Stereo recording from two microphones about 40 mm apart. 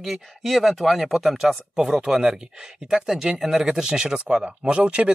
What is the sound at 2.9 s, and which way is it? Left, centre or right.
Speech, centre.